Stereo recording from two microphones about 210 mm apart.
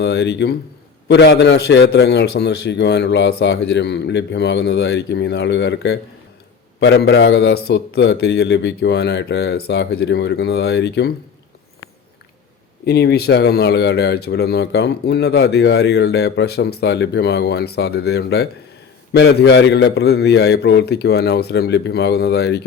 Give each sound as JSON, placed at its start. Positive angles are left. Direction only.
{"t": 0.0, "sound": "a man's voice", "side_deg": 55}
{"t": 12.8, "sound": "speech", "side_deg": 50}